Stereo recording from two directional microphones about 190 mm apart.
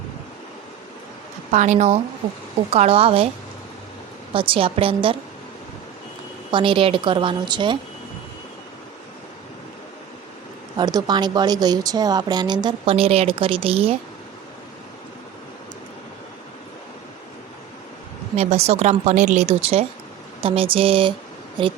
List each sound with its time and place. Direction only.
1.5 s a woman's voice: 40° right (ahead or behind)
4.4 s a woman's voice: 30° right (ahead or behind)
6.5 s a woman's voice: 25° right (ahead or behind)
10.8 s a woman's voice: 20° right (ahead or behind)
18.3 s a woman's voice: 35° right (ahead or behind)